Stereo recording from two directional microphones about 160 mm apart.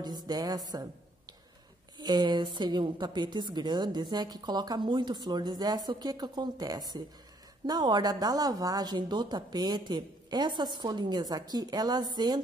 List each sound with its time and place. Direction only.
0.0 s a woman's voice: 25° right (ahead or behind)